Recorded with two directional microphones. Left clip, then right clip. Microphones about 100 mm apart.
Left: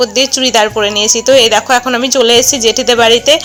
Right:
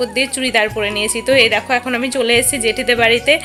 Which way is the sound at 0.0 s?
35° left (ahead or behind).